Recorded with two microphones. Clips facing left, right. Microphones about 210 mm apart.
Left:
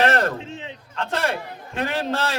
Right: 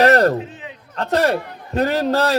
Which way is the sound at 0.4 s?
25° left (ahead or behind).